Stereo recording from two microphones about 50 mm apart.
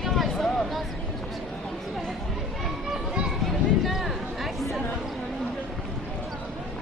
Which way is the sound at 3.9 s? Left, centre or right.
Centre.